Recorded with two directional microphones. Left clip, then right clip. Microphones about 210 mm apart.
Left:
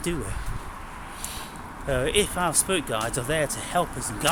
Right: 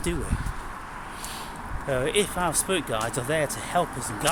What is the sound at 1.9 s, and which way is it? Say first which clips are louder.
Speech: left 1 dB; 10° left (ahead or behind).